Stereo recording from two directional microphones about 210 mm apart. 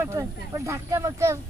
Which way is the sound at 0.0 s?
15° right (ahead or behind).